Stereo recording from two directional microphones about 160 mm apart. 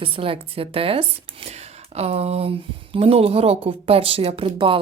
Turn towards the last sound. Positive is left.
turn(degrees=-35)  # may be behind; listen again after turning